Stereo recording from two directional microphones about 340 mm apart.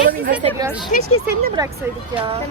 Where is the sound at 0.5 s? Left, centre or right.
Centre.